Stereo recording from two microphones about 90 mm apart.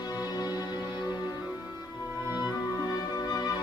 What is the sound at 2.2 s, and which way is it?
Music, 20° right (ahead or behind).